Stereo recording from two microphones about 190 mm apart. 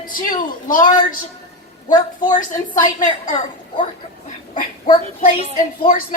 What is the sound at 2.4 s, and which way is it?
Speech, 40° left (ahead or behind).